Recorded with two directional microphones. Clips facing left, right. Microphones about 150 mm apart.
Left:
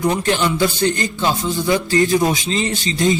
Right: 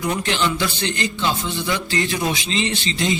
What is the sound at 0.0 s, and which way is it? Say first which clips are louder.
A man's voice: left 4 dB; 45° left (ahead or behind).